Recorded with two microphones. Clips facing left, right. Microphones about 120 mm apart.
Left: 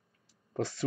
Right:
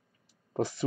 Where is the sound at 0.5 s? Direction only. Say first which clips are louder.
Right 3 dB; 15° right (ahead or behind).